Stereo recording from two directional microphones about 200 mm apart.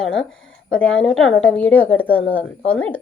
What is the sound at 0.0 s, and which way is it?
A woman's voice, 5° left (ahead or behind).